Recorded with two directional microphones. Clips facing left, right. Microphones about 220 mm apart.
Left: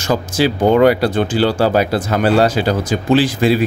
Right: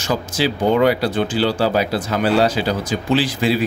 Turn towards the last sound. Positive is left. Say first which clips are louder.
# left 4 dB
turn(degrees=50)  # may be behind; listen again after turning